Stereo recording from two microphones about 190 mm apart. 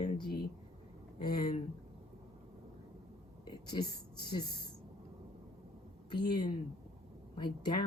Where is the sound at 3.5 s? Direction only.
20° left (ahead or behind).